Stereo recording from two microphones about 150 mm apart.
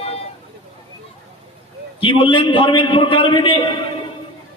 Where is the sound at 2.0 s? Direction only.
35° left (ahead or behind).